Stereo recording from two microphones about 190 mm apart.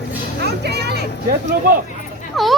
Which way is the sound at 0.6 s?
60° right (ahead or behind).